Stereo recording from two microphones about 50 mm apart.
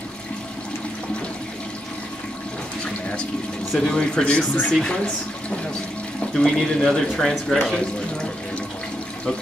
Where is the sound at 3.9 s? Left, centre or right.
Centre.